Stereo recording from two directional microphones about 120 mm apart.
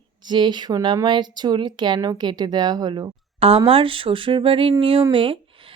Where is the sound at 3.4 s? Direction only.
50° right (ahead or behind).